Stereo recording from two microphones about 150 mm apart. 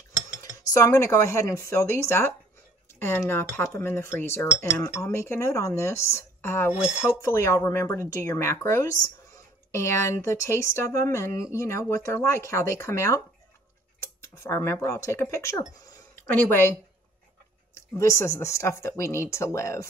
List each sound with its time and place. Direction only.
0.4 s speech: 20° left (ahead or behind)
17.9 s speech: 20° left (ahead or behind)